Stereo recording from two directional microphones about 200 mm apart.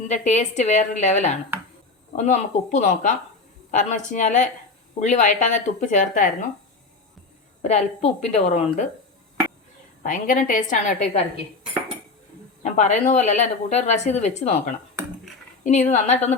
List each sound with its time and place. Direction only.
0.1 s speech: 35° left (ahead or behind)
7.6 s speech: 35° left (ahead or behind)
10.0 s speech: 40° left (ahead or behind)
12.6 s speech: 35° left (ahead or behind)